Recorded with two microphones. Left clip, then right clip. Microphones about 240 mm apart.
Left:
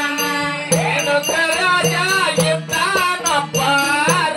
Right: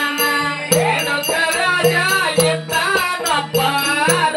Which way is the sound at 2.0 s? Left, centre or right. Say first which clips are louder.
Right 1 dB; left.